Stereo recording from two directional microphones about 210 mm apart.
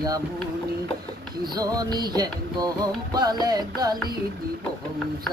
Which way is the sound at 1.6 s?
20° right (ahead or behind).